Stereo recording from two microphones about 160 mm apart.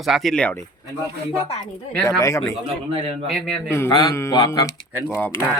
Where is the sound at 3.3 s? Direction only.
Centre (ahead or behind).